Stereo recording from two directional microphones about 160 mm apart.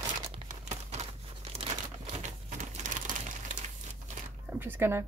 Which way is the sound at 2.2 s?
50° right (ahead or behind).